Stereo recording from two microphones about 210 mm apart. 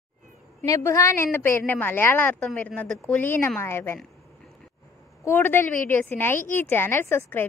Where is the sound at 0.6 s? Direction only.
15° left (ahead or behind).